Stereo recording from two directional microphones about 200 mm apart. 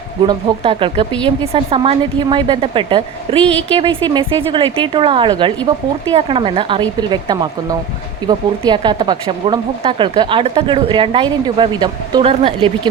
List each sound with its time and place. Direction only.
0.2 s speech: 25° right (ahead or behind)